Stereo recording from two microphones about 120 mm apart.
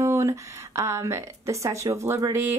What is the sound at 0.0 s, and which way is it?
A woman's voice, 25° right (ahead or behind).